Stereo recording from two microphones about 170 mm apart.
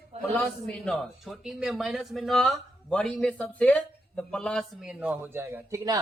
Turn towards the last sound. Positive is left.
turn(degrees=-20)  # may be behind; listen again after turning